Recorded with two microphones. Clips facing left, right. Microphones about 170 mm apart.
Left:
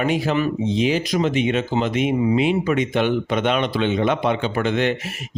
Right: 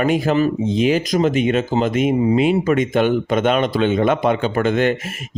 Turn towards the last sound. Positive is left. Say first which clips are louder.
# right 3 dB
turn(degrees=-45)  # may be behind; listen again after turning